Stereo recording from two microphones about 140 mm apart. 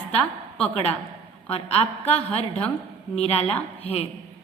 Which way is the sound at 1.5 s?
45° left (ahead or behind).